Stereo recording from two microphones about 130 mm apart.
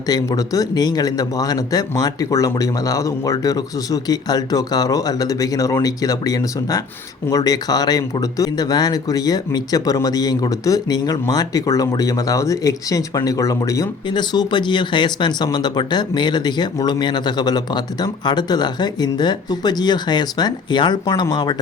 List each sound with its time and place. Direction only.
0.1 s speech: 30° left (ahead or behind)